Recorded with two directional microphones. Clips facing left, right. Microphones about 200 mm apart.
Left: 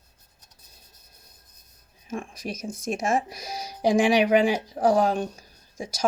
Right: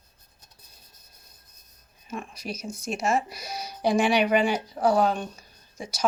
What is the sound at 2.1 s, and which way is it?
Speech, 50° left (ahead or behind).